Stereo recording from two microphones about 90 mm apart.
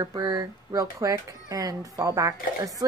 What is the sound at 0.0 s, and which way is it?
Speech, 45° right (ahead or behind).